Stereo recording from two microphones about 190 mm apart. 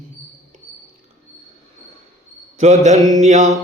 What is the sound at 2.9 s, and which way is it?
Mantra, 15° left (ahead or behind).